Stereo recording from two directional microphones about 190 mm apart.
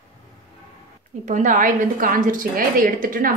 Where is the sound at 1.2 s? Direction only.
40° right (ahead or behind).